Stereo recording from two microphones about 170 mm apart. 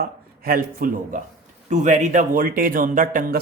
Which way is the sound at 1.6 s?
45° right (ahead or behind).